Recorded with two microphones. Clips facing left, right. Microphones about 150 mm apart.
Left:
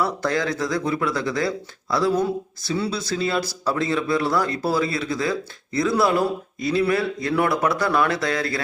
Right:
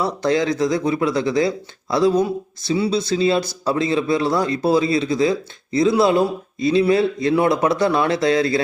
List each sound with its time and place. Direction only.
0.0 s speech: 20° right (ahead or behind)